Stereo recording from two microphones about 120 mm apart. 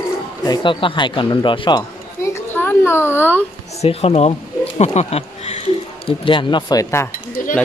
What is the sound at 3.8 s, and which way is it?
Speech, 60° left (ahead or behind).